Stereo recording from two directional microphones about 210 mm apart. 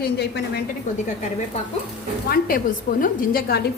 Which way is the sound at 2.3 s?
45° left (ahead or behind).